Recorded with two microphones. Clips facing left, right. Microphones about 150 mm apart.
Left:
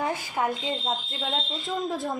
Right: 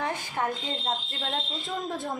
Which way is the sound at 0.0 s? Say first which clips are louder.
Left 2 dB; 10° left (ahead or behind).